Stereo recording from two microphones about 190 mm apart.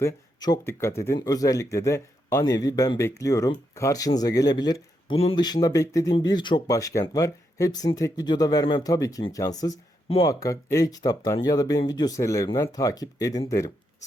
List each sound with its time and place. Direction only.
0.0 s speech: 20° left (ahead or behind)